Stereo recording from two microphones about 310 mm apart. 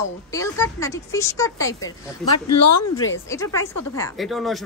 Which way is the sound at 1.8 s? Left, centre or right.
Left.